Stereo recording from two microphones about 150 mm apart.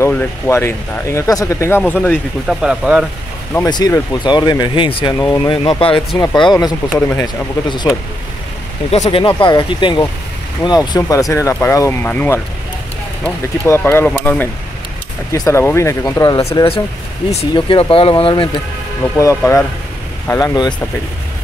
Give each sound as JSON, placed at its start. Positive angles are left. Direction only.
{"t": 0.0, "sound": "speech", "side_deg": 15}
{"t": 2.4, "sound": "speech", "side_deg": -5}
{"t": 3.5, "sound": "speech", "side_deg": 25}
{"t": 6.1, "sound": "speech", "side_deg": 25}
{"t": 7.0, "sound": "speech", "side_deg": 10}
{"t": 7.6, "sound": "speech", "side_deg": 30}
{"t": 8.9, "sound": "speech", "side_deg": 45}
{"t": 9.4, "sound": "speech", "side_deg": 30}
{"t": 13.7, "sound": "speech", "side_deg": 15}
{"t": 19.1, "sound": "speech", "side_deg": 20}